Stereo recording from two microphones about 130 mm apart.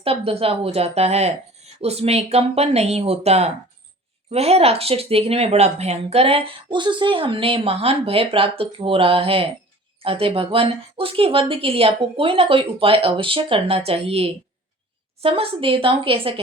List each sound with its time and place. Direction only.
0.0 s speech: 50° right (ahead or behind)